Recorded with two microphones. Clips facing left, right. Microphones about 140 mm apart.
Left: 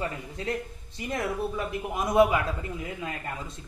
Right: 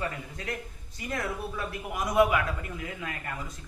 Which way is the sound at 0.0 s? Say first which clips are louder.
Left 2 dB; 25° left (ahead or behind).